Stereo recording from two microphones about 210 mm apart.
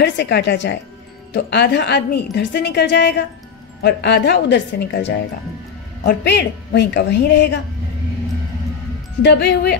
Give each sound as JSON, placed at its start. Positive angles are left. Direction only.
{"t": 0.0, "sound": "a woman's voice", "side_deg": 55}
{"t": 9.2, "sound": "a woman's voice", "side_deg": 55}